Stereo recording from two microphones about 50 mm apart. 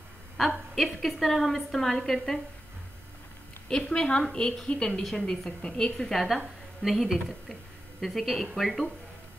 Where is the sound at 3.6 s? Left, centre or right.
Centre.